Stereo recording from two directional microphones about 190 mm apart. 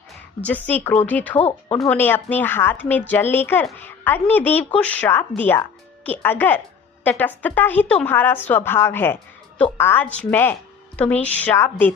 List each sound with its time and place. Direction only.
0.4 s speech: 10° left (ahead or behind)
1.4 s speech: 30° left (ahead or behind)
1.8 s a woman's voice: 10° left (ahead or behind)